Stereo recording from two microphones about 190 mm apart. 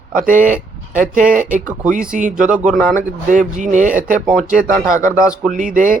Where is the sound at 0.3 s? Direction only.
45° right (ahead or behind).